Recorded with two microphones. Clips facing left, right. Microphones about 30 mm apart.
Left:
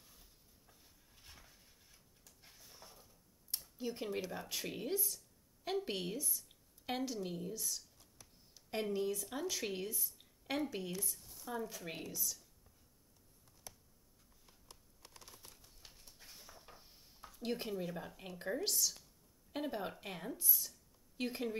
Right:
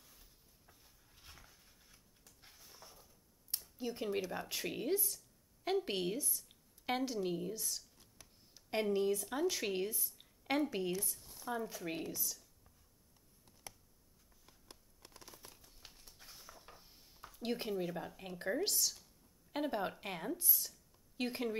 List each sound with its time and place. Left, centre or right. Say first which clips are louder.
0.0 s a sound: even; centre
4.3 s a woman's voice: right 2 dB; centre
10.5 s speech: right 4 dB; right
10.9 s speech: right 4 dB; centre
12.0 s speech: right 2 dB; centre
15.0 s a sound: right 2 dB; centre
17.4 s speech: right 2 dB; centre